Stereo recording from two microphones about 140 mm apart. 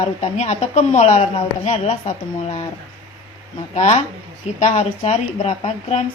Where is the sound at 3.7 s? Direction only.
55° left (ahead or behind).